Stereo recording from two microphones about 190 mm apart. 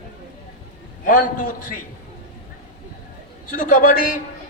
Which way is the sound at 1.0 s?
45° left (ahead or behind).